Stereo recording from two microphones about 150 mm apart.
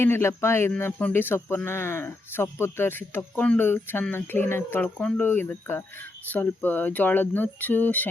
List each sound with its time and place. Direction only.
0.0 s speech: 15° left (ahead or behind)